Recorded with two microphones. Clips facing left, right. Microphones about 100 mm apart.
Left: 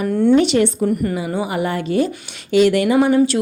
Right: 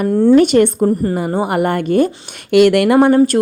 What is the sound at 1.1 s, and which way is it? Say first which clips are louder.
Speech: right 5 dB; 50° right (ahead or behind).